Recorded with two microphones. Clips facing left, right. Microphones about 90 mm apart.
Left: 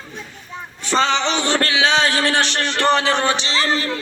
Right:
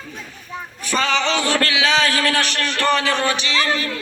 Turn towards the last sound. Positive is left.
turn(degrees=30)  # may be behind; listen again after turning